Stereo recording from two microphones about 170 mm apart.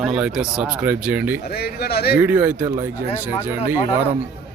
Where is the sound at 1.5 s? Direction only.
65° left (ahead or behind).